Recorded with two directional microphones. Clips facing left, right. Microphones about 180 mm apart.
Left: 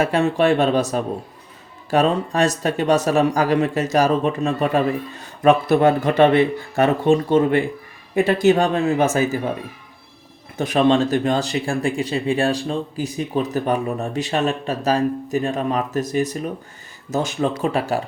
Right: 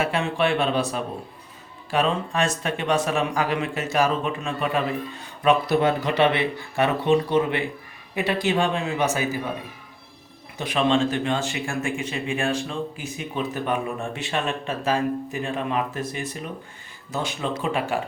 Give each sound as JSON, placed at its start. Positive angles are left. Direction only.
{"t": 0.0, "sound": "speech", "side_deg": 40}
{"t": 10.6, "sound": "speech", "side_deg": 40}